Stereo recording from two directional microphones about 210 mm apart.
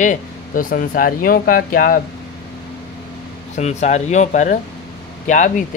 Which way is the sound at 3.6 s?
35° left (ahead or behind).